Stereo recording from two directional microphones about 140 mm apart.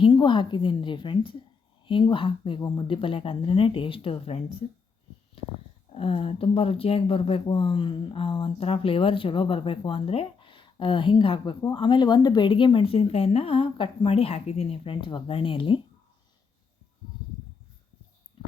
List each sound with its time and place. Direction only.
0.0 s a woman's voice: 35° left (ahead or behind)
5.9 s a woman's voice: 40° left (ahead or behind)
18.4 s a sound: 35° left (ahead or behind)